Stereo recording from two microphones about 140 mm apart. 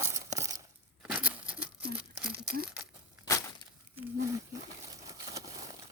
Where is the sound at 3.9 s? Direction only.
25° right (ahead or behind).